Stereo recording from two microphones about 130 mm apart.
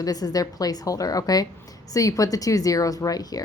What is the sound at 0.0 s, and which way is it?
A woman's voice, 30° left (ahead or behind).